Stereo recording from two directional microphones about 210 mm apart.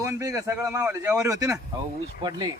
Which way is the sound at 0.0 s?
15° right (ahead or behind).